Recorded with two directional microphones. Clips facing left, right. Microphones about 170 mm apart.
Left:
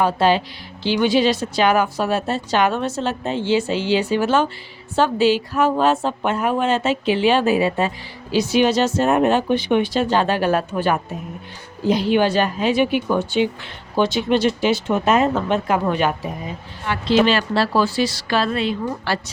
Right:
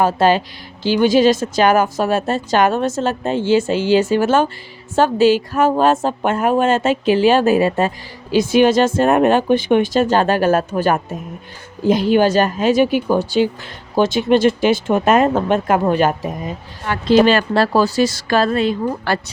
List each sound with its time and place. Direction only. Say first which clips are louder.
0.0 s a woman's voice: right 3 dB; 45° right (ahead or behind)